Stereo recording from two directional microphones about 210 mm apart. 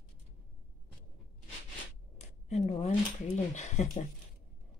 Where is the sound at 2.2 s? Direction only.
30° left (ahead or behind).